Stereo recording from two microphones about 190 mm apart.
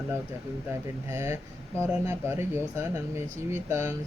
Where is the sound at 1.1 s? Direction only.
15° right (ahead or behind).